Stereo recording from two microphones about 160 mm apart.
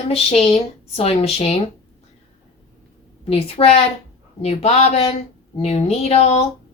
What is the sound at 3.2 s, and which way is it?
Speech, 40° left (ahead or behind).